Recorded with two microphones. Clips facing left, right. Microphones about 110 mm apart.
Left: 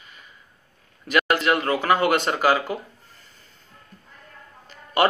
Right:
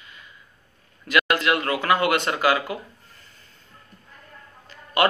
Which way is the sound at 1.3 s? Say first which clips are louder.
Left 1 dB; 30° left (ahead or behind).